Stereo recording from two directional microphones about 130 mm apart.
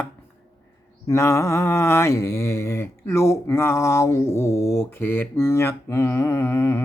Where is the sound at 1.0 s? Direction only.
20° left (ahead or behind).